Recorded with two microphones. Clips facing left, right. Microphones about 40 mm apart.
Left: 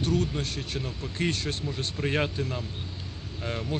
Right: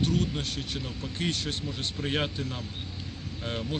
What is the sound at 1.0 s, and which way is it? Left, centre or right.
Speech, left.